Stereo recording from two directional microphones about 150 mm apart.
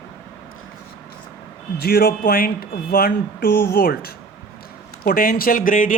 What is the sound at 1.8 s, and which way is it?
Speech, 90° left.